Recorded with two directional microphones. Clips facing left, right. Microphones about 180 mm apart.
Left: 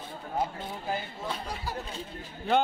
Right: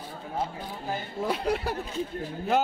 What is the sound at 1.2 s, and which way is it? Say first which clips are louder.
Speech: right 13 dB; 65° right (ahead or behind).